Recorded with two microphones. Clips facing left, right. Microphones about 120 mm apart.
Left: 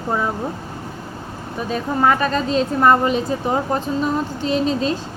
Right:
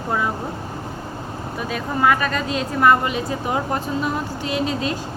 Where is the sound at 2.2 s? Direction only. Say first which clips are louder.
Left 4 dB; 30° left (ahead or behind).